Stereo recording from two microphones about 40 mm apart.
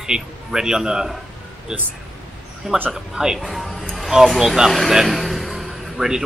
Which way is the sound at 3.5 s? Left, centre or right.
Centre.